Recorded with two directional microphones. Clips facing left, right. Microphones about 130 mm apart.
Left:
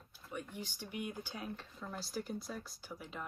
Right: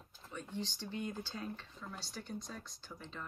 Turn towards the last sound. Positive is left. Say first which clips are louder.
# left 2 dB
turn(degrees=10)  # may be behind; listen again after turning